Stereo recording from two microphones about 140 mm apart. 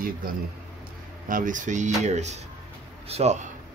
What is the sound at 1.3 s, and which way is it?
Speech, 65° right (ahead or behind).